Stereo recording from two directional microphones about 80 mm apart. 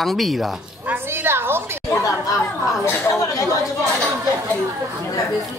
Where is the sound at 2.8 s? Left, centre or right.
Left.